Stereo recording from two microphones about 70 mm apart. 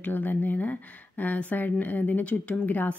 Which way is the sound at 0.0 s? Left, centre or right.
Left.